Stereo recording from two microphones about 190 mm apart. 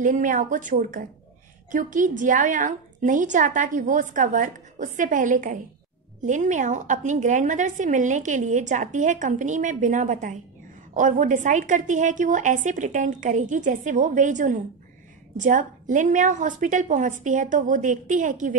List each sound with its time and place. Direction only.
0.0 s a woman's voice: 40° right (ahead or behind)